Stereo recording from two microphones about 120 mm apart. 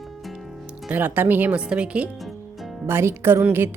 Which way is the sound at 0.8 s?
15° right (ahead or behind).